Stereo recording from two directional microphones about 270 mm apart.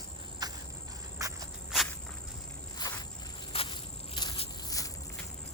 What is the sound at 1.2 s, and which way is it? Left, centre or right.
Walk, centre.